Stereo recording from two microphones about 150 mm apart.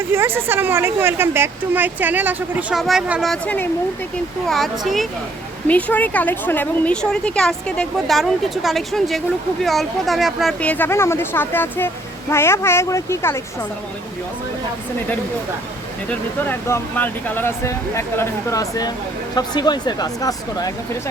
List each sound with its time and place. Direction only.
0.1 s speech: 15° right (ahead or behind)
3.4 s a woman's voice: 10° left (ahead or behind)
5.6 s a woman's voice: 10° left (ahead or behind)
10.6 s speech: 10° left (ahead or behind)
16.5 s speech: 15° left (ahead or behind)